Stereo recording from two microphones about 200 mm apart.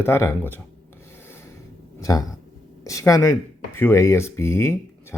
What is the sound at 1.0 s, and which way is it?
Rub, 10° left (ahead or behind).